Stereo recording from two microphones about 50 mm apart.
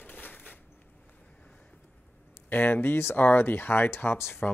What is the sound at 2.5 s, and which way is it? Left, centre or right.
Speech, left.